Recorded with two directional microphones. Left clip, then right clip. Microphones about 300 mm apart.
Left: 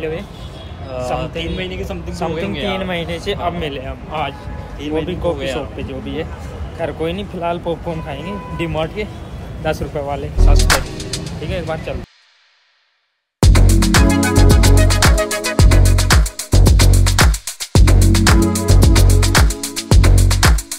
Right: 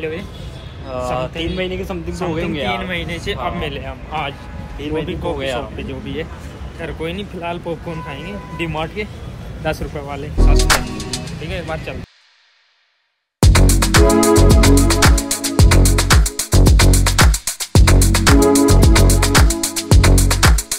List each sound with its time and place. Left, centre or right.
1.4 s speech: centre
2.2 s speech: centre
4.7 s speech: centre
5.0 s speech: centre
5.4 s speech: centre
5.8 s speech: centre
10.6 s music: centre
13.4 s music: centre